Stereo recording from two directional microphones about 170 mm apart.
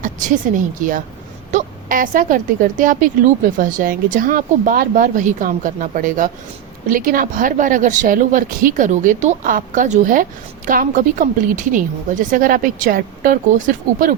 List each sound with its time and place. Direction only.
0.0 s a woman's voice: 50° right (ahead or behind)